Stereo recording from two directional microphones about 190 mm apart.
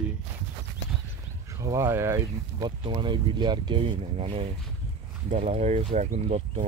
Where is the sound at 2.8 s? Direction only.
25° right (ahead or behind).